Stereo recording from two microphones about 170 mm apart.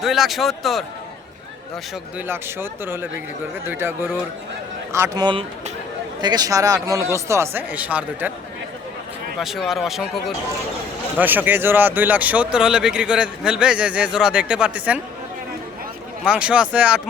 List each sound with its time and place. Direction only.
0.0 s speech: centre (ahead or behind)
2.1 s speech: 15° right (ahead or behind)
9.4 s speech: centre (ahead or behind)
16.2 s speech: 5° right (ahead or behind)